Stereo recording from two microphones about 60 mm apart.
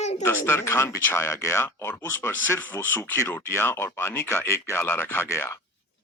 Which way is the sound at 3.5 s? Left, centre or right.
Left.